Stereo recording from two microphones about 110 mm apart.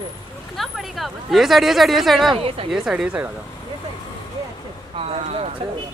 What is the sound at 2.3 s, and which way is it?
Speech, 55° right (ahead or behind).